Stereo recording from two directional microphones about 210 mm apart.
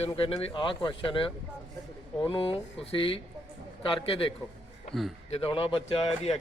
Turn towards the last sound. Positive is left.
turn(degrees=25)  # may be behind; listen again after turning